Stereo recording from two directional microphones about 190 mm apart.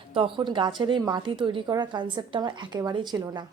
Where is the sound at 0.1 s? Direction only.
25° right (ahead or behind).